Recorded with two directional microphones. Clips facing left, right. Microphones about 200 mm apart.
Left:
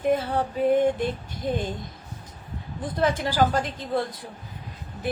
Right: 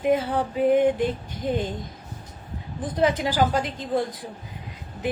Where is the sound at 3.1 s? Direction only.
15° right (ahead or behind).